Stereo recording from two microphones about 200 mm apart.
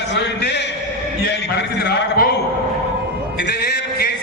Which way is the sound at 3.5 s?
55° left (ahead or behind).